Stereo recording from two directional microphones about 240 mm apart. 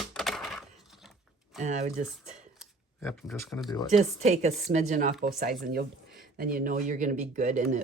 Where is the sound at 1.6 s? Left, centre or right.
Right.